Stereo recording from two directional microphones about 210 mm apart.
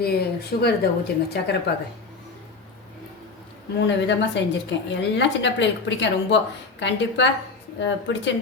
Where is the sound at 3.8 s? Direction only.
55° left (ahead or behind).